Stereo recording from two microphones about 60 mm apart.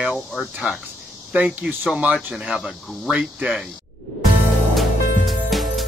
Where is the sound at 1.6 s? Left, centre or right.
Right.